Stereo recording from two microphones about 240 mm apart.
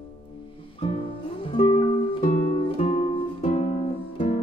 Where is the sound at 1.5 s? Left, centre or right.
Left.